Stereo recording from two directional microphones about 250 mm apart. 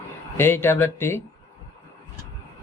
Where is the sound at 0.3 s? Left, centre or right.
Centre.